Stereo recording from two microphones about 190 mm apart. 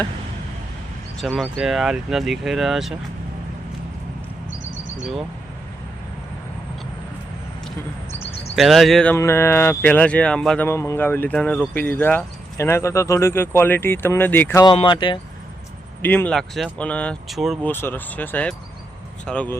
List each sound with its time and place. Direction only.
1.2 s speech: centre (ahead or behind)
8.5 s speech: centre (ahead or behind)
14.6 s speech: 25° left (ahead or behind)
16.0 s speech: 10° left (ahead or behind)